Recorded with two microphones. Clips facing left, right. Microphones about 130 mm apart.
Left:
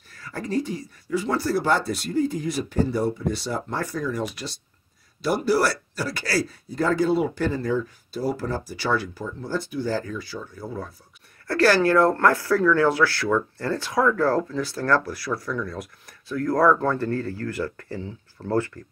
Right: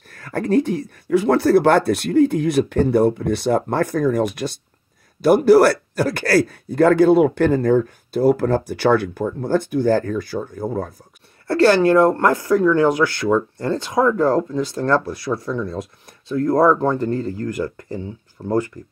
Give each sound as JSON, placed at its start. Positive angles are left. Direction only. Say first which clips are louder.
{"t": 0.1, "sound": "speech", "louder": "right 9 dB", "side_deg": -60}
{"t": 11.4, "sound": "speech", "louder": "right 5 dB", "side_deg": -25}